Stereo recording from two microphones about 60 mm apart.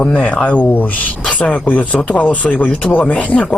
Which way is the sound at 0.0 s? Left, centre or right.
Left.